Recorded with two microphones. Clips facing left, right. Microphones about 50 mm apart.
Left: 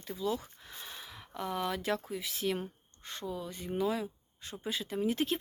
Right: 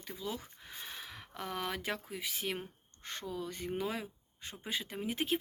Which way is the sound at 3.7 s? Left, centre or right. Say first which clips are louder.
Left 7 dB; right.